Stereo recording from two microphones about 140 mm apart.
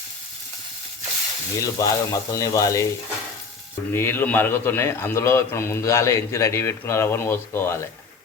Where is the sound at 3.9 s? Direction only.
15° left (ahead or behind).